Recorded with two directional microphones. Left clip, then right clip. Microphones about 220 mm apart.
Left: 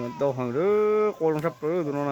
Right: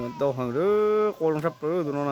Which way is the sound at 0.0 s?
5° right (ahead or behind).